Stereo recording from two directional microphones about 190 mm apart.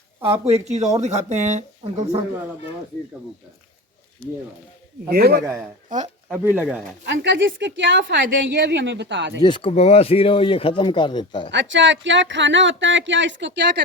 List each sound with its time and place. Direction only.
0.4 s speech: 35° right (ahead or behind)
5.0 s speech: 55° right (ahead or behind)
6.2 s speech: 10° right (ahead or behind)
7.0 s a woman's voice: 65° right (ahead or behind)
9.4 s speech: 25° left (ahead or behind)
11.5 s a woman's voice: 75° right (ahead or behind)